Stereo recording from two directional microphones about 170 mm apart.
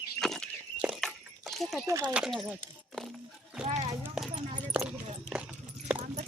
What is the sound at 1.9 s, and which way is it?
Speech, 20° right (ahead or behind).